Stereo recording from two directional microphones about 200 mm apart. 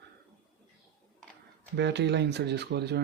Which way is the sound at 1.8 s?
60° right (ahead or behind).